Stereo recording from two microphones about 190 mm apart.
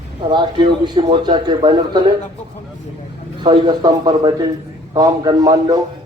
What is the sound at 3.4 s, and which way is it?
A man's voice, 20° right (ahead or behind).